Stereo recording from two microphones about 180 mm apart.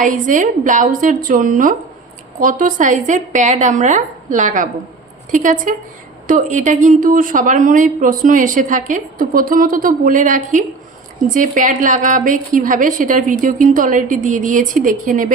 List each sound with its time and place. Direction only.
0.0 s speech: 45° right (ahead or behind)